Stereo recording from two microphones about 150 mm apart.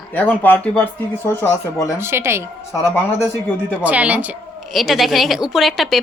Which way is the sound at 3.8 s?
10° right (ahead or behind).